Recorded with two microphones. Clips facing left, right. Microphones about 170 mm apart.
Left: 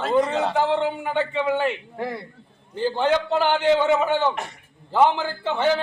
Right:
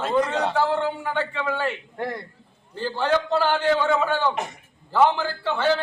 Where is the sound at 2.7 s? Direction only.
20° left (ahead or behind).